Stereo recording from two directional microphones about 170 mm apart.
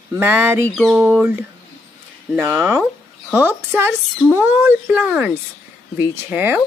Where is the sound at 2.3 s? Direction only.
15° right (ahead or behind).